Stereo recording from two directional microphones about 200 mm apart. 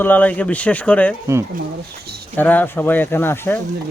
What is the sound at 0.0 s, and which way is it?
Speech, 10° left (ahead or behind).